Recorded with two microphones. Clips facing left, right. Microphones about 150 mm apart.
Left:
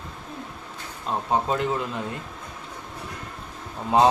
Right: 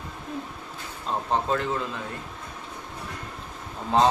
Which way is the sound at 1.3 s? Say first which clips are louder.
Left 1 dB; 15° left (ahead or behind).